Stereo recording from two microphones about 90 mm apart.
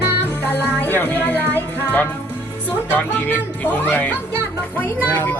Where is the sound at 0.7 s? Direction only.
20° left (ahead or behind).